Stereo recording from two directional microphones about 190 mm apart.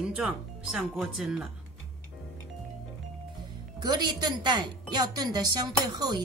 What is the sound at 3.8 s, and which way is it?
A woman's voice, 20° right (ahead or behind).